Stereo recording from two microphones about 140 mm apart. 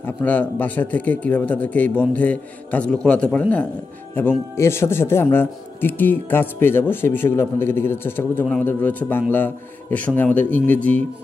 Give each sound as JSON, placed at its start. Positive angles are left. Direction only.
{"t": 0.0, "sound": "speech", "side_deg": 10}